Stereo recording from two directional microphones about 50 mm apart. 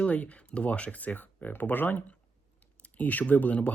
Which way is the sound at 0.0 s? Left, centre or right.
Left.